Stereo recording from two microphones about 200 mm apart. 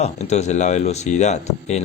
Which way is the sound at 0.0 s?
35° left (ahead or behind).